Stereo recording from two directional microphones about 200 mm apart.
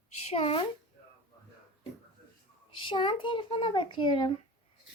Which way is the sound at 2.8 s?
25° left (ahead or behind).